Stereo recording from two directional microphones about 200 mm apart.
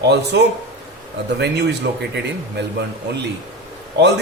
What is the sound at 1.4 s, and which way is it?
A man's voice, 60° right (ahead or behind).